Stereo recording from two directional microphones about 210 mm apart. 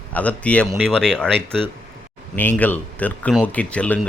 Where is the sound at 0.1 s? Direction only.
5° left (ahead or behind).